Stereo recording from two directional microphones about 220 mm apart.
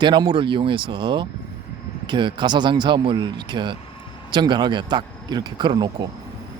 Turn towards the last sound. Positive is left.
turn(degrees=-20)  # may be behind; listen again after turning